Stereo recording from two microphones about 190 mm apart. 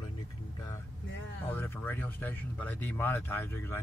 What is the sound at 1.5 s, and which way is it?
Speech, 10° left (ahead or behind).